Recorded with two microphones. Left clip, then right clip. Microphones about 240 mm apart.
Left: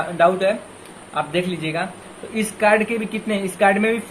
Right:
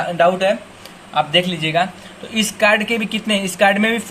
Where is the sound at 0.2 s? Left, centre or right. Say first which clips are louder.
Right 1 dB; right.